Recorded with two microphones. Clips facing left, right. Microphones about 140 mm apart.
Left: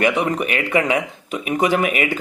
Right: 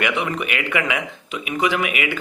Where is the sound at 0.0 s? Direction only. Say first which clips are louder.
Left 4 dB; 40° left (ahead or behind).